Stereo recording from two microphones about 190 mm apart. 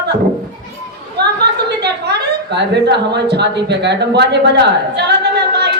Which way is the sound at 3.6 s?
65° right (ahead or behind).